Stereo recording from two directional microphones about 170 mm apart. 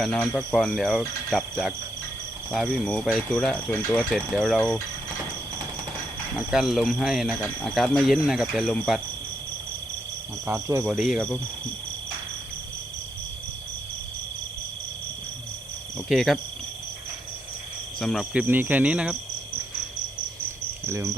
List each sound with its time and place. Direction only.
0.0 s speech: 5° left (ahead or behind)
6.5 s speech: centre (ahead or behind)
10.4 s speech: 15° right (ahead or behind)
10.8 s speech: 5° right (ahead or behind)
16.0 s speech: centre (ahead or behind)
18.0 s speech: centre (ahead or behind)
18.4 s speech: 10° right (ahead or behind)
20.8 s speech: 15° right (ahead or behind)